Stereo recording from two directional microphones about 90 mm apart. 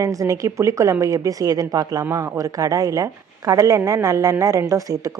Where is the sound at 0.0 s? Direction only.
40° right (ahead or behind).